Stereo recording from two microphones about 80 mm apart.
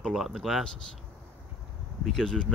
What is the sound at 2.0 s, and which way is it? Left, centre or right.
Speech, centre.